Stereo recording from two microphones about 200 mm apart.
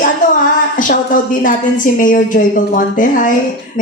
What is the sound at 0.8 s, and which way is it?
Speech, 40° left (ahead or behind).